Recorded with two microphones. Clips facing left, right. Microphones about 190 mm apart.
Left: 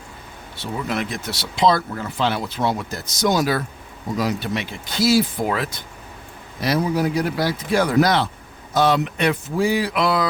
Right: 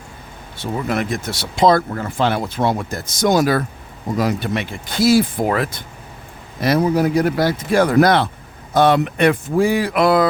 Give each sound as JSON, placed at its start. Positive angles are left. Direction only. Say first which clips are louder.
{"t": 0.5, "sound": "speech", "louder": "right 4 dB", "side_deg": -50}